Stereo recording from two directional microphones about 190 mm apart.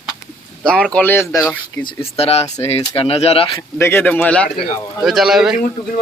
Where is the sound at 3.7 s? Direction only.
10° left (ahead or behind).